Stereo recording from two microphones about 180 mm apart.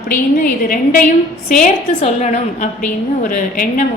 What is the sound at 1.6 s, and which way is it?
A woman's voice, 40° left (ahead or behind).